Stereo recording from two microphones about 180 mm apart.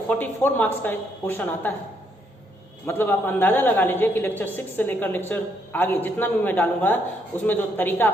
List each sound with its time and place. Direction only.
0.1 s a woman's voice: 10° left (ahead or behind)
2.8 s a woman's voice: 10° left (ahead or behind)